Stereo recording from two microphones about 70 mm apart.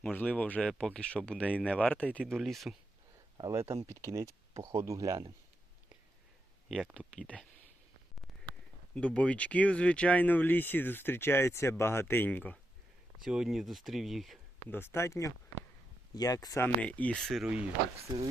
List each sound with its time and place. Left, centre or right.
0.0 s speech: centre
2.2 s speech: centre
3.5 s speech: right
6.9 s speech: centre
9.0 s speech: centre
13.2 s speech: centre
14.7 s speech: left
16.1 s speech: left
16.6 s speech: centre
17.2 s speech: centre